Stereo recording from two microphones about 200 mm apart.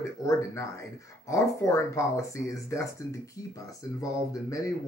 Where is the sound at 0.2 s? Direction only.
15° left (ahead or behind).